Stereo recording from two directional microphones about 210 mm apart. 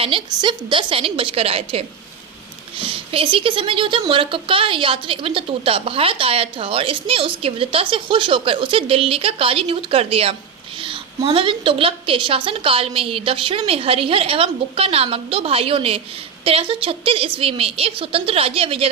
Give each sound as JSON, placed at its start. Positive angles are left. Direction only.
{"t": 0.0, "sound": "speech", "side_deg": -25}